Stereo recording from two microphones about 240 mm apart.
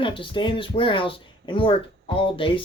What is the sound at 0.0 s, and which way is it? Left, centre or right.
Speech, left.